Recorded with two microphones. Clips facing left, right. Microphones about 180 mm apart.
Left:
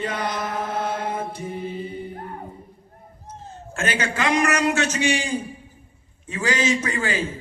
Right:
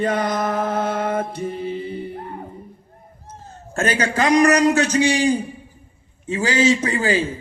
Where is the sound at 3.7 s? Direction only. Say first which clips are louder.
Right 5 dB; 40° right (ahead or behind).